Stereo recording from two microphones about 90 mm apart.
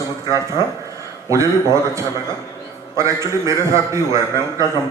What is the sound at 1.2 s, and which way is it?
A man's voice, 35° right (ahead or behind).